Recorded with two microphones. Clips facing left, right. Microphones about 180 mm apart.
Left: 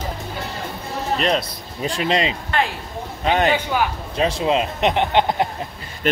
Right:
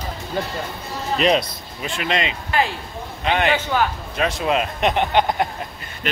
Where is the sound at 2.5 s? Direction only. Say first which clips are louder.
Right 1 dB; 10° right (ahead or behind).